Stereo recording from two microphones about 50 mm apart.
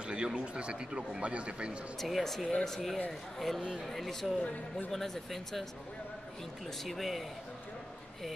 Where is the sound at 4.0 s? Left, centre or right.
Centre.